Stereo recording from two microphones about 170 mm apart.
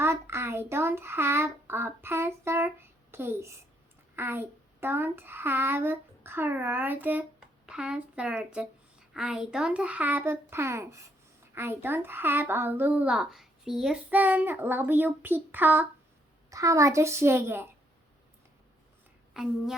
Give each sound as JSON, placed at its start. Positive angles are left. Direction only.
{"t": 0.0, "sound": "a child's voice", "side_deg": -15}
{"t": 19.3, "sound": "a woman's voice", "side_deg": 0}